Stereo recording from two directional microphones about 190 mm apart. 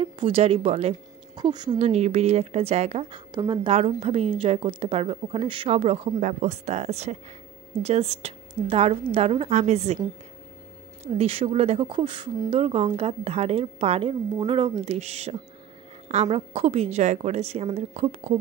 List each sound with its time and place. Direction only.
0.0 s a woman's voice: 30° right (ahead or behind)
1.3 s a woman's voice: 20° right (ahead or behind)
11.1 s a woman's voice: 30° right (ahead or behind)